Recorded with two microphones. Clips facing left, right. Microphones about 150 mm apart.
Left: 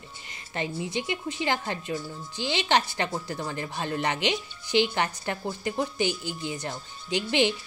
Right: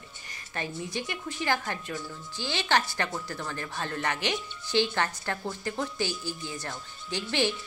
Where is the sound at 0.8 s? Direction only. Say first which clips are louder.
Left 4 dB; 20° left (ahead or behind).